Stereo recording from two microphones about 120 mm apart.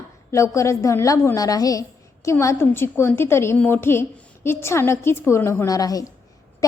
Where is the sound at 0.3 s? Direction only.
25° left (ahead or behind).